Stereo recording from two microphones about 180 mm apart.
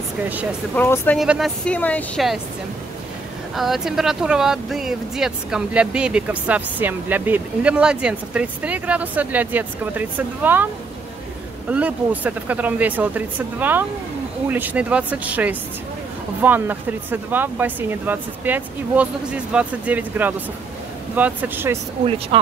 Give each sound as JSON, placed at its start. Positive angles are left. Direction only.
{"t": 0.7, "sound": "speech", "side_deg": 10}
{"t": 1.1, "sound": "speech", "side_deg": 0}
{"t": 1.7, "sound": "speech", "side_deg": 10}
{"t": 3.5, "sound": "speech", "side_deg": 0}
{"t": 11.7, "sound": "speech", "side_deg": -10}
{"t": 22.3, "sound": "speech", "side_deg": -30}